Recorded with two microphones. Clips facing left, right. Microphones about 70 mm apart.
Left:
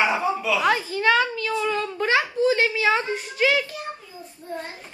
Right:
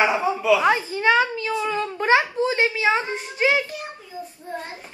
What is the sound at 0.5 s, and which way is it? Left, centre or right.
Speech, right.